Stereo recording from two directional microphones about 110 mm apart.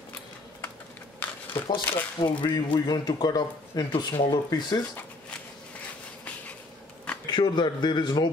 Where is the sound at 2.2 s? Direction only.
50° left (ahead or behind).